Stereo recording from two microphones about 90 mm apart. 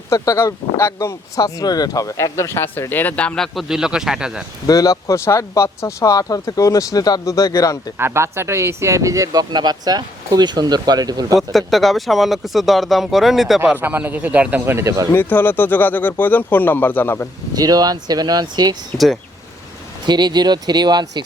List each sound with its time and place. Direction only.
0.1 s speech: 35° left (ahead or behind); by 4.4 s 10° right (ahead or behind)
4.6 s speech: 40° left (ahead or behind)
7.9 s speech: 30° right (ahead or behind); by 11.3 s 45° right (ahead or behind)
11.5 s speech: centre (ahead or behind)
13.7 s a man's voice: 20° right (ahead or behind)
14.8 s speech: 35° right (ahead or behind)
15.1 s speech: 20° left (ahead or behind)
17.5 s speech: 45° right (ahead or behind)
18.9 s speech: centre (ahead or behind)
20.1 s speech: 55° right (ahead or behind)